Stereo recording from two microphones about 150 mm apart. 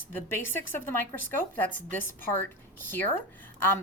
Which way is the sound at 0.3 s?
15° left (ahead or behind).